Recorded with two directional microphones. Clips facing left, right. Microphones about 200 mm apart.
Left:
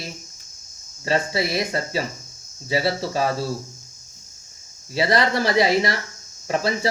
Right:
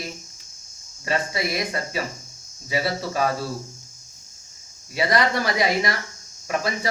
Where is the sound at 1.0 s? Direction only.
30° left (ahead or behind).